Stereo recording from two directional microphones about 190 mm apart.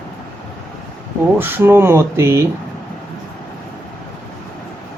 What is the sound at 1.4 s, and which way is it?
Speech, 10° right (ahead or behind).